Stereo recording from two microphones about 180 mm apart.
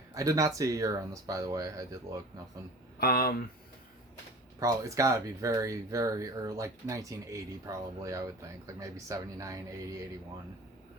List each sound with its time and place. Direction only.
0.1 s speech: 20° right (ahead or behind)
3.0 s speech: 60° left (ahead or behind)
4.6 s speech: 20° right (ahead or behind)